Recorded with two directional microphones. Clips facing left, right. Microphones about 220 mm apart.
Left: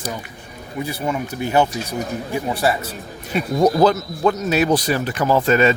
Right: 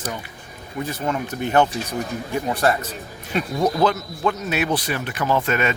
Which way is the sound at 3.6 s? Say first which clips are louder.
Left 5 dB; 40° left (ahead or behind).